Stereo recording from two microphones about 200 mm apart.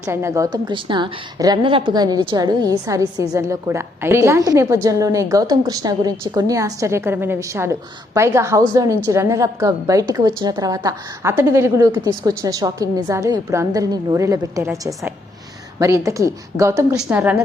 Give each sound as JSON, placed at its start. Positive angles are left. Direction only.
{"t": 0.0, "sound": "a woman's voice", "side_deg": -15}